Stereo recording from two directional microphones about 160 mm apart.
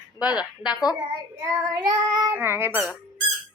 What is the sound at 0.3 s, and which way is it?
Speech, 25° left (ahead or behind).